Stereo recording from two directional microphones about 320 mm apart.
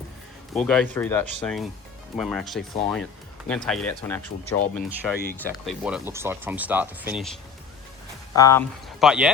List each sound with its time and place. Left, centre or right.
0.5 s speech: centre
8.4 s speech: centre